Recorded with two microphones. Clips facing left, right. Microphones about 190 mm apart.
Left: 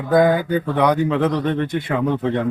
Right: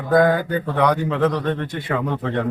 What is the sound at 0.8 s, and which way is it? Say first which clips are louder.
Speech: even; 15° left (ahead or behind).